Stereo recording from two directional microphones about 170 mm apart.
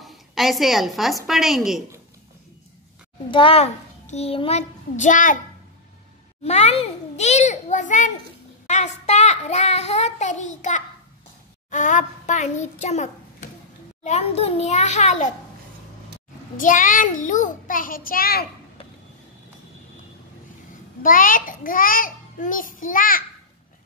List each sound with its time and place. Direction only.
0.0 s a woman's voice: centre (ahead or behind)
3.3 s a child's voice: 30° left (ahead or behind); by 5.4 s 50° left (ahead or behind)
6.4 s a child's voice: 40° left (ahead or behind)
16.5 s a child's voice: 50° left (ahead or behind)
21.0 s a child's voice: 55° left (ahead or behind)